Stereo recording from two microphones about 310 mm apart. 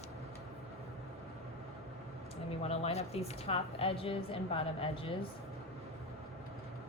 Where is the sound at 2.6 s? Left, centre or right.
Centre.